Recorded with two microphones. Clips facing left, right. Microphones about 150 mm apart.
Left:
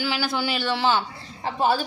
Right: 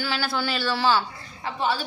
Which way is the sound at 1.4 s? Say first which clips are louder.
Left 4 dB; 45° left (ahead or behind).